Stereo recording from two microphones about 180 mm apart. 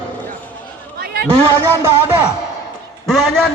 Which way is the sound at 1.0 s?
55° right (ahead or behind).